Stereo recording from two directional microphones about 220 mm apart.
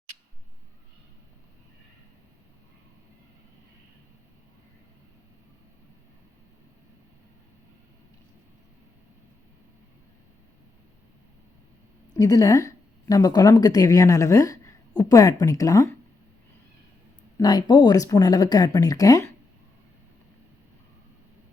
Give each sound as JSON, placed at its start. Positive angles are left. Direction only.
{"t": 12.1, "sound": "speech", "side_deg": 15}
{"t": 17.3, "sound": "speech", "side_deg": 20}